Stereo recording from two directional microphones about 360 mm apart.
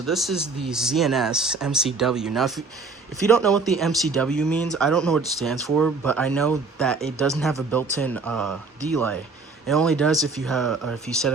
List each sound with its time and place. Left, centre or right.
0.0 s speech: centre
9.6 s speech: centre